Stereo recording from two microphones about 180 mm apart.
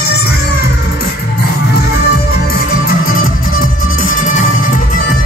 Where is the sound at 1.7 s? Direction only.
60° left (ahead or behind).